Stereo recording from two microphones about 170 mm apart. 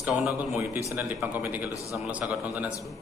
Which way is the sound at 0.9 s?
10° right (ahead or behind).